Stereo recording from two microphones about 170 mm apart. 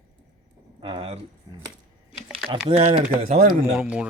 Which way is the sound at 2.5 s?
35° right (ahead or behind).